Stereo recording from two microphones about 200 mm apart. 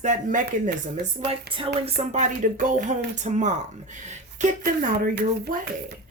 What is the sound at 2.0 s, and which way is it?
Speech, 40° right (ahead or behind).